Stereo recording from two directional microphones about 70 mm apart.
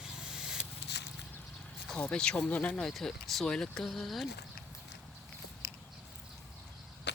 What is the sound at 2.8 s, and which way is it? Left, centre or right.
Speech, centre.